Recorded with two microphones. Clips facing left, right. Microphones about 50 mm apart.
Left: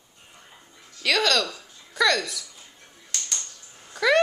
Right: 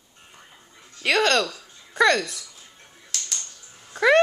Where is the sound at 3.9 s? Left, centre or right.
Right.